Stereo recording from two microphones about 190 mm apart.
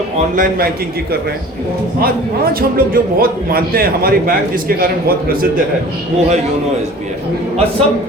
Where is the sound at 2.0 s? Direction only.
50° right (ahead or behind).